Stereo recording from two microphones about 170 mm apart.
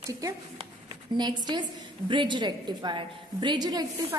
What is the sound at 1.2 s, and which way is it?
A woman's voice, 25° right (ahead or behind).